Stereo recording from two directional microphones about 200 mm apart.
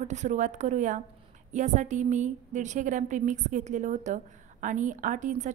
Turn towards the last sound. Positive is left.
turn(degrees=-40)  # may be behind; listen again after turning